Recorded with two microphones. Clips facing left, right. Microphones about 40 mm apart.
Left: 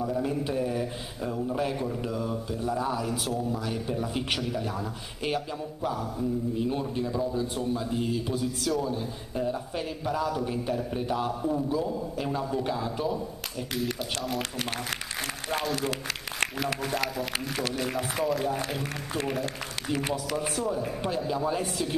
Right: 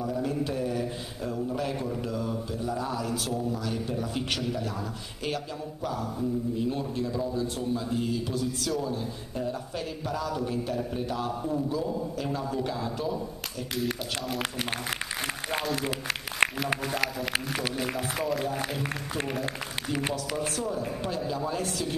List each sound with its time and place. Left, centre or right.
0.0 s a man's voice: centre
5.9 s a man's voice: centre
8.9 s a man's voice: centre
15.7 s speech: centre
16.4 s a sound: right
16.8 s speech: centre
20.2 s a man's voice: centre